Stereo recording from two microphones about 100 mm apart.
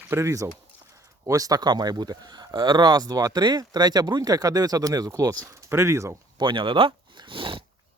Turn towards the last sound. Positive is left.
turn(degrees=-60)  # may be behind; listen again after turning